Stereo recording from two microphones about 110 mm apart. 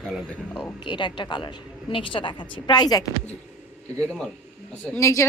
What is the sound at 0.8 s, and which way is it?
A woman's voice, 45° left (ahead or behind).